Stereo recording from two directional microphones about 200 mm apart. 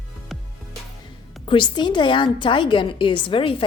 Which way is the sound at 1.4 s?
25° left (ahead or behind).